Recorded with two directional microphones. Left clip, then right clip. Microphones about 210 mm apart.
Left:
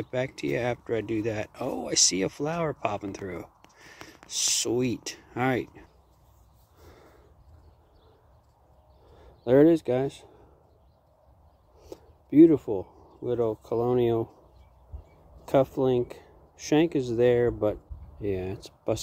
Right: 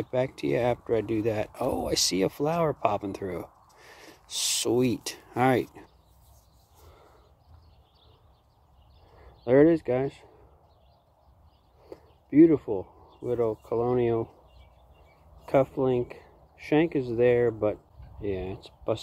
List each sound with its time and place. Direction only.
0.0 s speech: centre (ahead or behind)
9.4 s speech: 20° left (ahead or behind)
11.9 s speech: 20° left (ahead or behind)
15.4 s speech: 15° left (ahead or behind)